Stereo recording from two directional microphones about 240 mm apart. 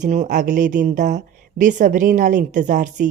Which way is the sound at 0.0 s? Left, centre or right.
Right.